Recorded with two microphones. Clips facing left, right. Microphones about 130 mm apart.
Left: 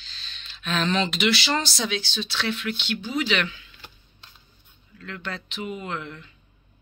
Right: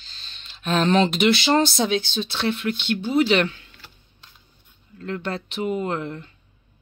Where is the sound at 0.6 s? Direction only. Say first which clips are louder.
Right 6 dB; 45° right (ahead or behind).